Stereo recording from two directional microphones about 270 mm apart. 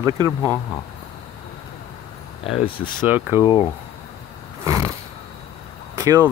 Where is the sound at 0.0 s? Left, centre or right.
Centre.